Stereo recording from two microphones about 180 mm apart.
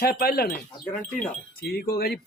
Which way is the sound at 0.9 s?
5° left (ahead or behind).